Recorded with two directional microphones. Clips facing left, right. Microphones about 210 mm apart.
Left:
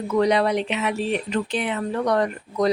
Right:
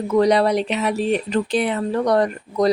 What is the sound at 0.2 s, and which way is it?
Speech, 35° right (ahead or behind).